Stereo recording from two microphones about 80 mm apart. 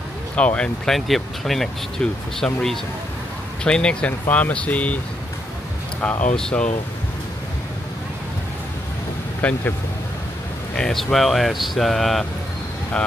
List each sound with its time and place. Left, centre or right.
0.4 s speech: centre
0.8 s speech: centre
6.3 s speech: centre
9.4 s speech: centre
10.8 s speech: centre